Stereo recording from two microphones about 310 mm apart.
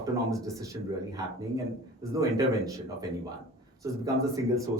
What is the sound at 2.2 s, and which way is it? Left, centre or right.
Speech, centre.